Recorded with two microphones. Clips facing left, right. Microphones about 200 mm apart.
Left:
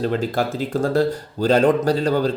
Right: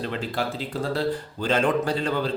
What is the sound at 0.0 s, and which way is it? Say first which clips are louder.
Speech: left 7 dB; 40° left (ahead or behind).